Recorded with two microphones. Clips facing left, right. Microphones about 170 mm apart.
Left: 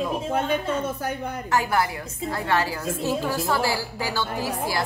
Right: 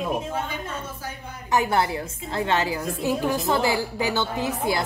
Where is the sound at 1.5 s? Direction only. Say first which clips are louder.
Right 2 dB; 25° right (ahead or behind).